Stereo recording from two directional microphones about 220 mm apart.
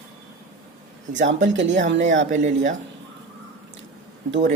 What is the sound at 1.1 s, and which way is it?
Speech, 55° right (ahead or behind).